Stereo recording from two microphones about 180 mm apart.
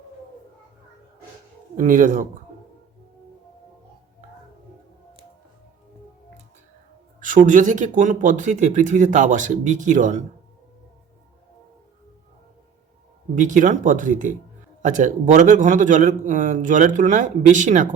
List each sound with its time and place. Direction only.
1.7 s a man's voice: 45° right (ahead or behind)
7.2 s a man's voice: 45° right (ahead or behind)
13.3 s a man's voice: 45° right (ahead or behind)